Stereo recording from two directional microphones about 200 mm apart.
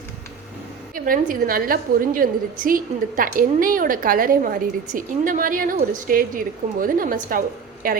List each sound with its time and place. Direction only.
0.9 s a woman's voice: 45° right (ahead or behind)